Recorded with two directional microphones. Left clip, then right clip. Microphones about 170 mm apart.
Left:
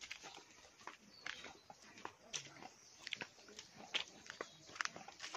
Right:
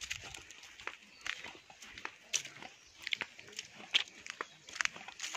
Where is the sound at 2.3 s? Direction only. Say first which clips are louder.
Right 11 dB; 15° right (ahead or behind).